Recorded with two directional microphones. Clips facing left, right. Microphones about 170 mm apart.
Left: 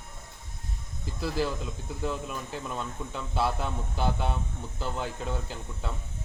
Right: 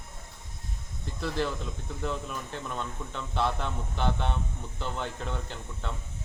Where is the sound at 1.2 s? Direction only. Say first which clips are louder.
Left 1 dB; 5° left (ahead or behind).